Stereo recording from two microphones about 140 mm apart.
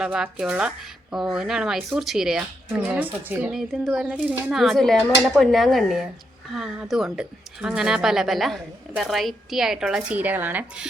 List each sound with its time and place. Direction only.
0.0 s speech: 5° right (ahead or behind)
4.6 s speech: centre (ahead or behind)